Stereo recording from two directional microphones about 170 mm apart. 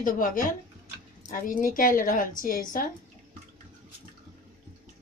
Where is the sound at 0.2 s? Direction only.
55° left (ahead or behind).